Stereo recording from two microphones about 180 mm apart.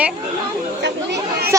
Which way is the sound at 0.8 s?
70° right (ahead or behind).